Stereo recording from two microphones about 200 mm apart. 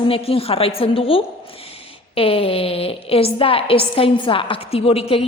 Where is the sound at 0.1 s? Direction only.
30° left (ahead or behind).